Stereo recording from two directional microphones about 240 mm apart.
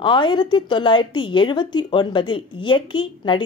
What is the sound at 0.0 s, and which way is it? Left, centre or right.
Speech, centre.